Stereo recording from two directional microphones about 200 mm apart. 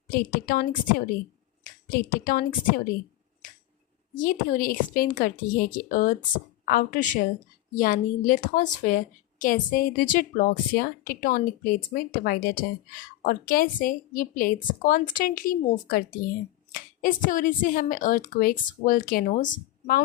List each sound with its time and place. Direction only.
0.1 s a woman's voice: 45° left (ahead or behind)
4.2 s a woman's voice: 45° left (ahead or behind)